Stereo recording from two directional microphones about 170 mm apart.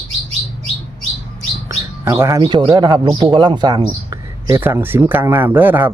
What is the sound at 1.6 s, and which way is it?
A man's voice, 15° right (ahead or behind).